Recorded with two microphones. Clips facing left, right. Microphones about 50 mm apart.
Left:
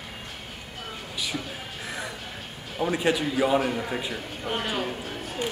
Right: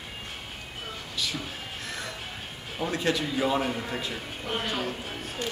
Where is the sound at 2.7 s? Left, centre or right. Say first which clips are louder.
Left 3 dB; centre.